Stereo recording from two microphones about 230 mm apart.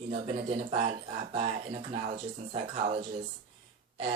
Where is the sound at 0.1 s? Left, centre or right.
Right.